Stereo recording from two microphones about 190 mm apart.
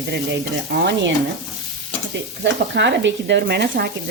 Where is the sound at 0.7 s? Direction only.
65° right (ahead or behind).